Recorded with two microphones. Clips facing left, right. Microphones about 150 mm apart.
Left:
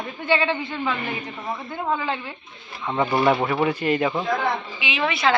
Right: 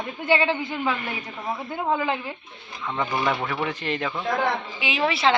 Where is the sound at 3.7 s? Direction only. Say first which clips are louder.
Left 6 dB; 10° left (ahead or behind).